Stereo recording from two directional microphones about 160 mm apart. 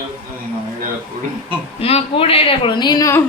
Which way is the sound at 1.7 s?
35° left (ahead or behind).